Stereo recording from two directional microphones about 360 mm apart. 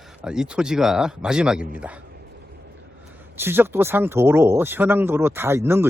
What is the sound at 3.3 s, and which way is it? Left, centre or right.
Speech, centre.